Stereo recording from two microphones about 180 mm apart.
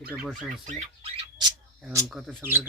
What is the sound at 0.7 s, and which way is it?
Speech, 40° right (ahead or behind).